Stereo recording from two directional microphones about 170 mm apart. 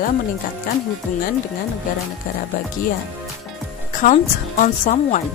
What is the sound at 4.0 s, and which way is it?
A woman's voice, 50° left (ahead or behind).